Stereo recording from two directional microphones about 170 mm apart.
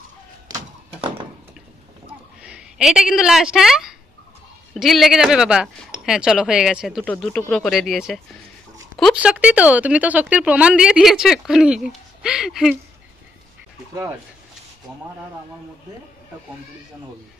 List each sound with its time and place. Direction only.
2.4 s a woman's voice: 5° right (ahead or behind)
7.1 s speech: 10° left (ahead or behind)
9.2 s speech: 5° right (ahead or behind)